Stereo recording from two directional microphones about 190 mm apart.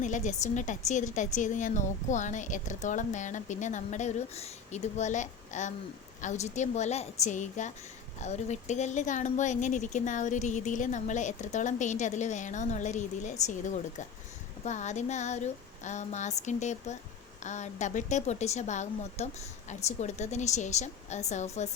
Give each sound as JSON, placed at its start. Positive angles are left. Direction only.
{"t": 0.0, "sound": "speech", "side_deg": 40}